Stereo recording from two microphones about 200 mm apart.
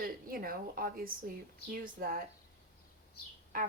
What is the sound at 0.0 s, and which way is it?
Speech, 45° right (ahead or behind).